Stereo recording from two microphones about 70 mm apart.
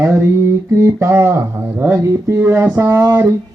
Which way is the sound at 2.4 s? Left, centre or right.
Right.